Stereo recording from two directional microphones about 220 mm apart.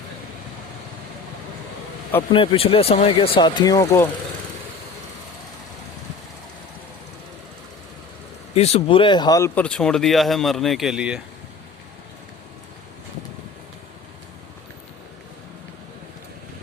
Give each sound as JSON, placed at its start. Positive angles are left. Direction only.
{"t": 2.3, "sound": "speech", "side_deg": 25}
{"t": 8.5, "sound": "speech", "side_deg": 30}